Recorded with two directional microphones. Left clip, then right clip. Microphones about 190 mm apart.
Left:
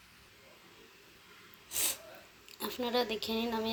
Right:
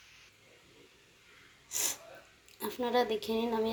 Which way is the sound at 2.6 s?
10° left (ahead or behind).